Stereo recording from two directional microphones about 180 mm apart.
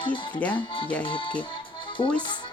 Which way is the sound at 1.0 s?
30° left (ahead or behind).